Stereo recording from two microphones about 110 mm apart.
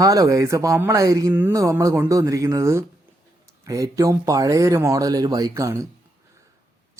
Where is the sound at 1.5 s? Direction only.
30° right (ahead or behind).